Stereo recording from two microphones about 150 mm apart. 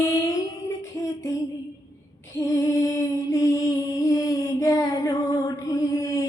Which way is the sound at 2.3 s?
20° left (ahead or behind).